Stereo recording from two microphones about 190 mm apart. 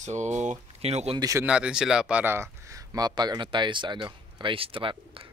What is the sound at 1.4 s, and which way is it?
A man's voice, 5° right (ahead or behind).